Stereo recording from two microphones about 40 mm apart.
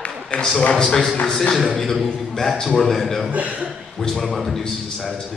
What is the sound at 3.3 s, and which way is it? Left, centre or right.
Speech, right.